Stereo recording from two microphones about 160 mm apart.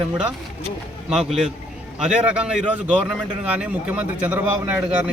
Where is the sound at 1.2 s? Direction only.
Centre (ahead or behind).